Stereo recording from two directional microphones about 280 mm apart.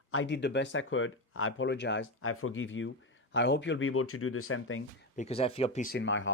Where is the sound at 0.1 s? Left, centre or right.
Left.